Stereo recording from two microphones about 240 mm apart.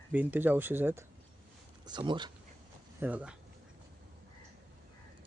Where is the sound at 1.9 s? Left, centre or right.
Centre.